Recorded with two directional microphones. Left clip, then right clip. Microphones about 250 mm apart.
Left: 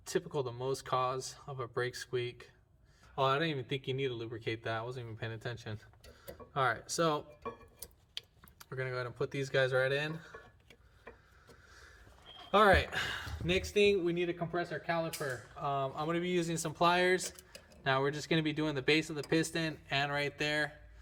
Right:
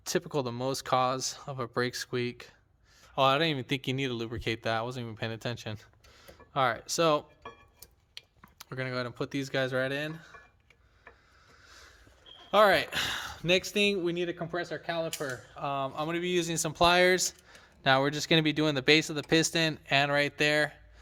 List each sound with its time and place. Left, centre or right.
0.0 s speech: right
8.5 s speech: right
11.7 s a sound: right
12.5 s speech: right